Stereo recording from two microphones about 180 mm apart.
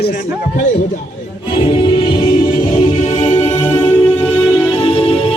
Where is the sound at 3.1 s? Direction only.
35° left (ahead or behind).